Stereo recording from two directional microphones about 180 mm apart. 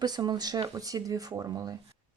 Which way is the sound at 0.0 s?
20° right (ahead or behind).